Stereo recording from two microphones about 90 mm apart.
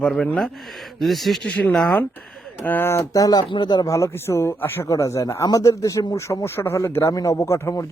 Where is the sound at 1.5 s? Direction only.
15° left (ahead or behind); by 3.9 s 50° left (ahead or behind).